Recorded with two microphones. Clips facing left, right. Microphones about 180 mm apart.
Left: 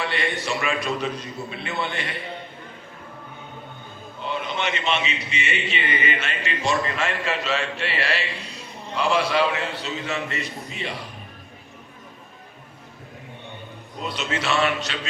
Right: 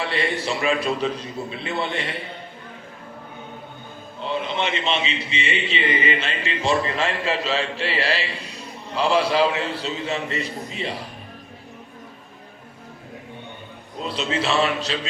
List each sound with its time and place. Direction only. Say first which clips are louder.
0.0 s a man's voice: right 2 dB; 30° right (ahead or behind)
4.4 s a man's voice: even; 30° right (ahead or behind)
14.1 s a man's voice: right 3 dB; 30° right (ahead or behind)